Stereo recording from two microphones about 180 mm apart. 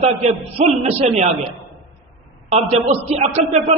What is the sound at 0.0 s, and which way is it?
A man's voice, 35° right (ahead or behind).